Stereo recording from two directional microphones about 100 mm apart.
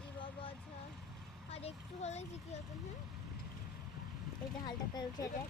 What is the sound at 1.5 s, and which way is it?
Child singing, 90° left.